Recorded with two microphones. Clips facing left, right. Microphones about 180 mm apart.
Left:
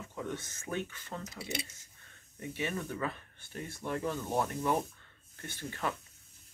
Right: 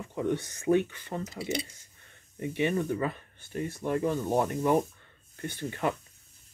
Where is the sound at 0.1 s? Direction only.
20° right (ahead or behind).